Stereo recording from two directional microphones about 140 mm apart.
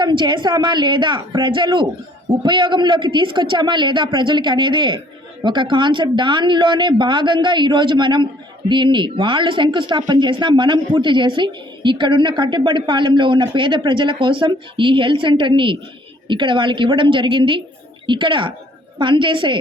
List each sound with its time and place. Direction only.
0.0 s speech: 35° right (ahead or behind)